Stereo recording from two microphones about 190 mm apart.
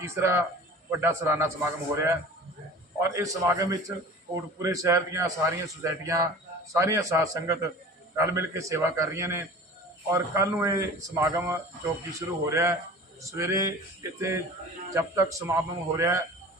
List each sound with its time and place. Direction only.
0.0 s a man's voice: 15° right (ahead or behind)